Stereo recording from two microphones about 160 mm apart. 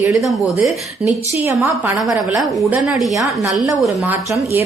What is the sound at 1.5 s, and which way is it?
Speech, 15° right (ahead or behind).